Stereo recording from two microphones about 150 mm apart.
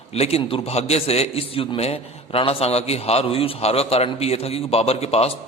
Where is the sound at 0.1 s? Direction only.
40° left (ahead or behind).